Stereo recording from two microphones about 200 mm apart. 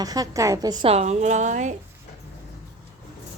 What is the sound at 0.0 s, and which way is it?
A woman's voice, 20° right (ahead or behind).